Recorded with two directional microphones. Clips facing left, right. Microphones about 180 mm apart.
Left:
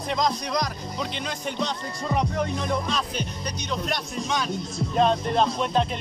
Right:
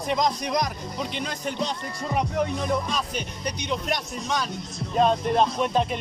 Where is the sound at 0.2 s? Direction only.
20° right (ahead or behind).